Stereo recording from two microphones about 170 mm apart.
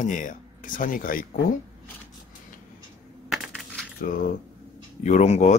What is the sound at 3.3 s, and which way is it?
Coin, centre (ahead or behind).